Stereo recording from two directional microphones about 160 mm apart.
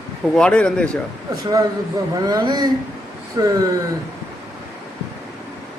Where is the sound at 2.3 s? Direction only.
25° right (ahead or behind).